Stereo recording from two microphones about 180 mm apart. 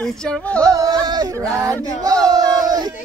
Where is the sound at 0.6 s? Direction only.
20° right (ahead or behind).